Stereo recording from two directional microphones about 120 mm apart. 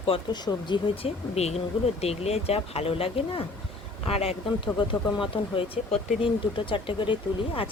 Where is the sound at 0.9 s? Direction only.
55° left (ahead or behind).